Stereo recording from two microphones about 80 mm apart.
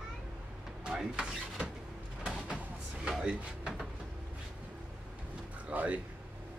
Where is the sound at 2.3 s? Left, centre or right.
Centre.